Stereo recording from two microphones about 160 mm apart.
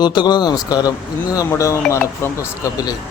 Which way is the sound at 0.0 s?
25° left (ahead or behind).